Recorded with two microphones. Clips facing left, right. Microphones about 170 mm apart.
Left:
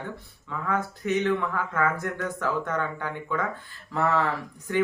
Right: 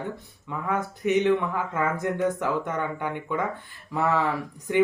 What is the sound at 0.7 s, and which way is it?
Speech, 20° right (ahead or behind).